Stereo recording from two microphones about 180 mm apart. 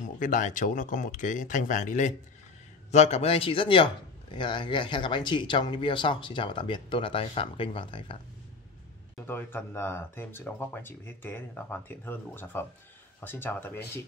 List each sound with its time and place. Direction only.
0.0 s a man's voice: 45° left (ahead or behind); by 8.2 s 30° left (ahead or behind)
9.2 s speech: 10° left (ahead or behind)